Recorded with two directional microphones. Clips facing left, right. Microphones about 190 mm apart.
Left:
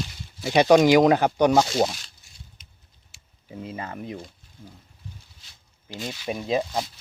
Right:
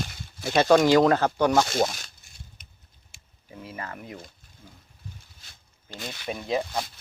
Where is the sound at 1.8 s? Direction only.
50° right (ahead or behind).